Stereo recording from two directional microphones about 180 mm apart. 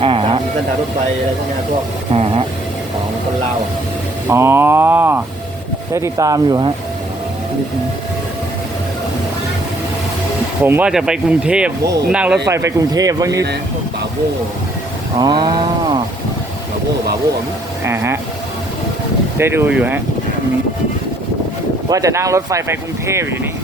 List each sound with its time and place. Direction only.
0.0 s a sound: 30° right (ahead or behind)
4.3 s speech: 15° right (ahead or behind)
10.6 s speech: 10° right (ahead or behind)
12.5 s speech: 15° right (ahead or behind)
15.2 s speech: 25° right (ahead or behind)
17.8 s speech: 15° right (ahead or behind)
19.4 s speech: 15° right (ahead or behind)
21.8 s speech: 20° right (ahead or behind)